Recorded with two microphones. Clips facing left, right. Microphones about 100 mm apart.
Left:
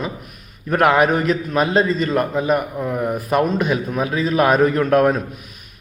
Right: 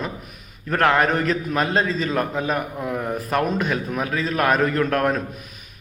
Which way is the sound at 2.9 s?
15° left (ahead or behind).